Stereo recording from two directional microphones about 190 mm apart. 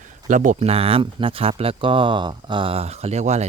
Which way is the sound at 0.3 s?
40° right (ahead or behind).